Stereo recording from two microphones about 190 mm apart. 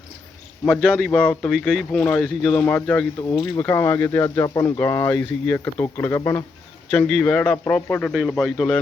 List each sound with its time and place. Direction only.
0.6 s speech: centre (ahead or behind)
3.2 s speech: 25° left (ahead or behind)
3.4 s speech: 10° left (ahead or behind)